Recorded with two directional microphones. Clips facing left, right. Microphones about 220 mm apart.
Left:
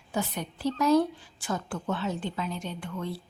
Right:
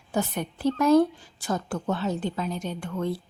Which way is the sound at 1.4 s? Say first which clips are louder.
Right 4 dB; 40° right (ahead or behind).